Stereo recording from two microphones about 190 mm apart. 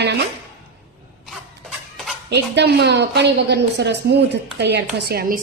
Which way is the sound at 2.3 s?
65° right (ahead or behind).